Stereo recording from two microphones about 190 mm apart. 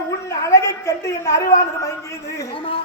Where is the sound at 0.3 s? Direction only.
15° left (ahead or behind).